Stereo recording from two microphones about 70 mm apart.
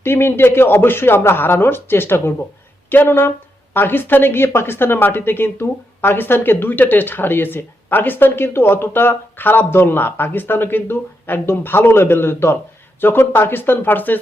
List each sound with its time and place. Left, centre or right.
0.0 s speech: left